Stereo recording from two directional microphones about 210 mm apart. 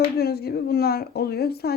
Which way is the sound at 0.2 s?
50° left (ahead or behind).